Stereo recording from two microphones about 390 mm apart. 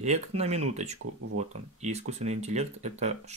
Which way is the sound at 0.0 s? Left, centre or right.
Centre.